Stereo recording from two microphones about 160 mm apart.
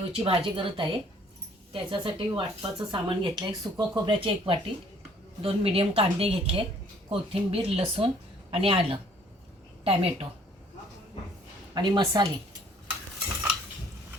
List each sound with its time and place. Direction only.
0.1 s speech: 35° right (ahead or behind)
11.7 s speech: 30° right (ahead or behind)